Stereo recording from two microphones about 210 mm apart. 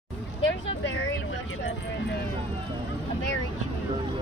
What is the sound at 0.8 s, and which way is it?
Vehicle, 60° left (ahead or behind).